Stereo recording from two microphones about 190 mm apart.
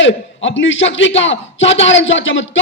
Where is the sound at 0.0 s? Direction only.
80° left.